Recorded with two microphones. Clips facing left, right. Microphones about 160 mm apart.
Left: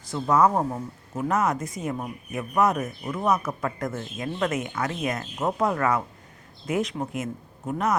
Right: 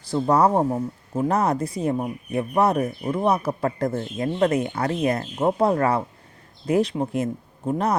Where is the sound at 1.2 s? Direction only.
35° right (ahead or behind).